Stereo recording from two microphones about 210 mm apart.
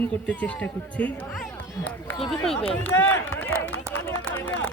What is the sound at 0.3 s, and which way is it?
Speech, 5° left (ahead or behind).